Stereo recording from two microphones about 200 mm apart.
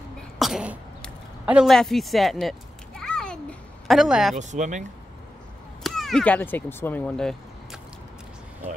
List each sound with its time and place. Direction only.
0.4 s throat clearing: 5° right (ahead or behind)
4.4 s speech: 35° right (ahead or behind)
5.9 s speech: centre (ahead or behind)